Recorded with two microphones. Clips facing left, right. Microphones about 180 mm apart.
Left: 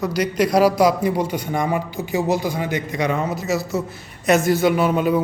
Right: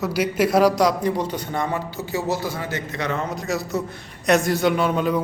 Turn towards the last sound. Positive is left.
turn(degrees=5)  # may be behind; listen again after turning